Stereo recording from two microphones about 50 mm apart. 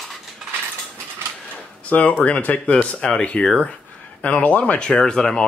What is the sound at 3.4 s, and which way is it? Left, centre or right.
Speech, centre.